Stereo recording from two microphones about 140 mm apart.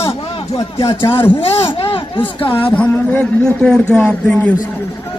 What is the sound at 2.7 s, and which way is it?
A man's voice, 10° left (ahead or behind).